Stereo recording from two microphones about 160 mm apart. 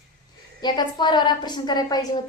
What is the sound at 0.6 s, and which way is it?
A woman's voice, 25° left (ahead or behind).